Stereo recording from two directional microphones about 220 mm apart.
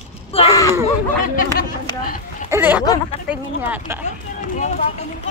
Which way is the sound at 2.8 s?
15° left (ahead or behind).